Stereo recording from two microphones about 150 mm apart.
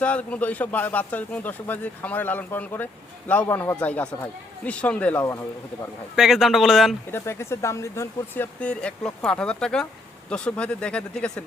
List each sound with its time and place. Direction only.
0.0 s speech: 10° left (ahead or behind)
6.1 s speech: centre (ahead or behind)
7.1 s speech: 15° left (ahead or behind)
8.6 s speech: 5° left (ahead or behind)